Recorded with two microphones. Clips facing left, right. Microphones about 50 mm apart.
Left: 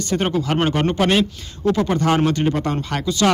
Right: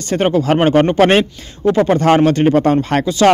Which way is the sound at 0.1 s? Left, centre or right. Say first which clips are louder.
Right 7 dB; right.